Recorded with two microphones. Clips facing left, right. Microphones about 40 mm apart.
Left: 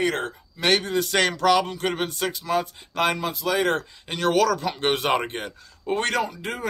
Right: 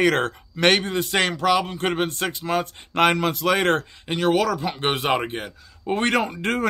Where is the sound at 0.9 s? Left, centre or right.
Right.